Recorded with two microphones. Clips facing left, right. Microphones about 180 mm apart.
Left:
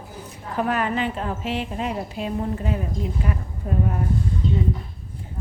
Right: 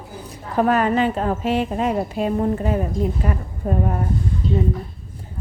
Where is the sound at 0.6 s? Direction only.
40° right (ahead or behind).